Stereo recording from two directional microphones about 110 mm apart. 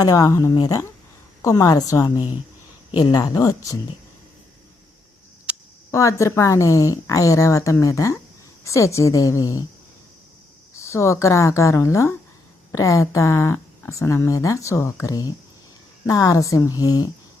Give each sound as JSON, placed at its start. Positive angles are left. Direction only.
{"t": 0.0, "sound": "a woman's voice", "side_deg": 35}
{"t": 5.5, "sound": "a sound", "side_deg": -10}
{"t": 5.9, "sound": "a woman's voice", "side_deg": 30}
{"t": 10.8, "sound": "a woman's voice", "side_deg": 30}